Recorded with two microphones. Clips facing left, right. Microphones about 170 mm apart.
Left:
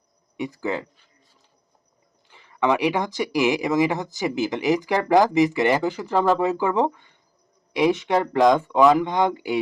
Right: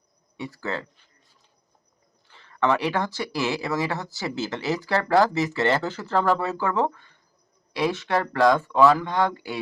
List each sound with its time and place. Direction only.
0.3 s speech: 15° left (ahead or behind)
2.2 s speech: 15° left (ahead or behind)